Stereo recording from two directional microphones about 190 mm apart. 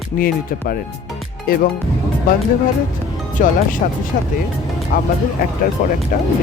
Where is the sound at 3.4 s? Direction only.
45° left (ahead or behind).